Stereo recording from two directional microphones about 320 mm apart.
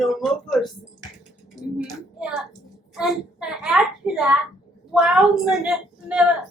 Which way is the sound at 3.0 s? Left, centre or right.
Centre.